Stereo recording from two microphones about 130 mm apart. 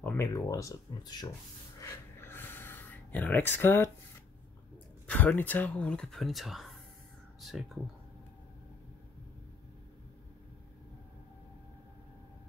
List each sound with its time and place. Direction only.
0.2 s speech: 25° left (ahead or behind)
1.8 s a sound: 20° left (ahead or behind)
5.0 s speech: 15° left (ahead or behind)